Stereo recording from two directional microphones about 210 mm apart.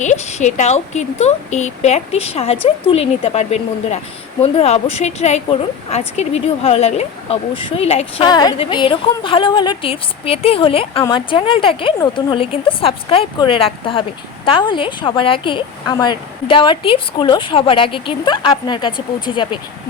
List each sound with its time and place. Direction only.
0.0 s a woman's voice: 35° left (ahead or behind)